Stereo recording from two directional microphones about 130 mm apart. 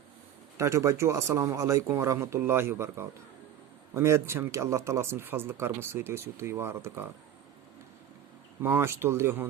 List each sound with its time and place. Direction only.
0.5 s speech: 25° right (ahead or behind)
8.6 s speech: 15° right (ahead or behind)